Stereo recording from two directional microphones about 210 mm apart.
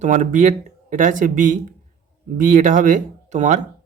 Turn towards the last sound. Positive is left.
turn(degrees=-35)  # may be behind; listen again after turning